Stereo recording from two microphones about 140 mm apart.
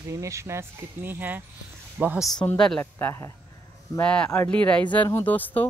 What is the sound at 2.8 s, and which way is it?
Speech, 20° left (ahead or behind).